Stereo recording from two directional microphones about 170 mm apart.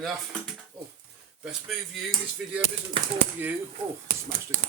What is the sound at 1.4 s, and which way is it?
Speech, centre (ahead or behind).